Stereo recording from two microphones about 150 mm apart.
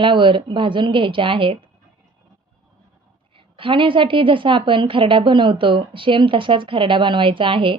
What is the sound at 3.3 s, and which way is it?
A woman's voice, 35° right (ahead or behind).